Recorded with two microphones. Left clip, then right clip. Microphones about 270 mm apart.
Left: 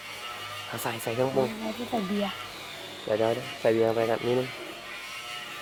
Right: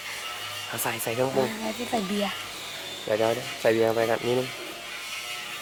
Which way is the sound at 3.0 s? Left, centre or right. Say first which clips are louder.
Right 1 dB; centre.